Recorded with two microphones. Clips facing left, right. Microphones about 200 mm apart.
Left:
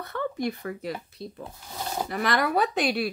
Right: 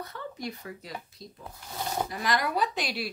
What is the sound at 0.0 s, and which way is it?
Speech, 60° left (ahead or behind).